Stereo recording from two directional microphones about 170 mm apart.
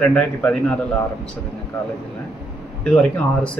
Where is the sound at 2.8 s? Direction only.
5° left (ahead or behind).